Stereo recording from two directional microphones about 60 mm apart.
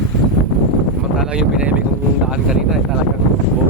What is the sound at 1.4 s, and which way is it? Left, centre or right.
Speech, centre.